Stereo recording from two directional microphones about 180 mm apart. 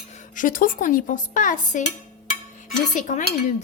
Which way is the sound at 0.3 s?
50° left (ahead or behind).